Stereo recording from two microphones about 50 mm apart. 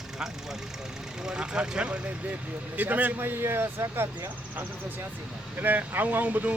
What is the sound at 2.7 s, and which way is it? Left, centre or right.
A man's voice, right.